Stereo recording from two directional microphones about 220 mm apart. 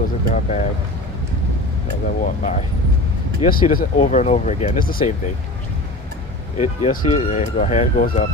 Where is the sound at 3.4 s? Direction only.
40° left (ahead or behind).